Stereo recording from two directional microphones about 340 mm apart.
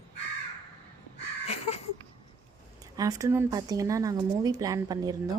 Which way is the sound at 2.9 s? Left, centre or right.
Centre.